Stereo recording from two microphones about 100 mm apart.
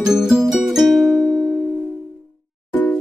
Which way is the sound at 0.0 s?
5° right (ahead or behind).